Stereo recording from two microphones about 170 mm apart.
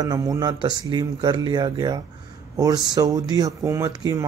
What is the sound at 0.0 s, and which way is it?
Speech, 20° right (ahead or behind).